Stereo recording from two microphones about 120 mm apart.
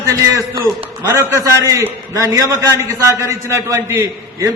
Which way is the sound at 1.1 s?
20° right (ahead or behind).